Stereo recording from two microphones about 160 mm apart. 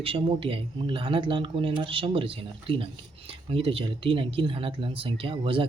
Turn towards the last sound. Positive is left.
turn(degrees=-35)  # may be behind; listen again after turning